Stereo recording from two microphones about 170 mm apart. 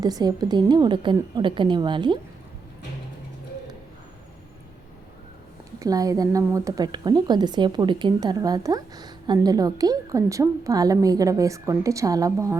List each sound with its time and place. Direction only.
0.0 s speech: 20° right (ahead or behind)
5.8 s speech: 20° right (ahead or behind)